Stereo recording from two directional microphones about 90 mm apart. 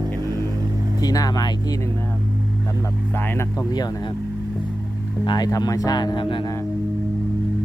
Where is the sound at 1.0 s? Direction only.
45° left (ahead or behind).